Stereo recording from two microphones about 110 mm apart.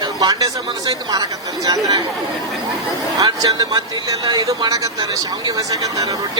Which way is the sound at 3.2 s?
35° right (ahead or behind).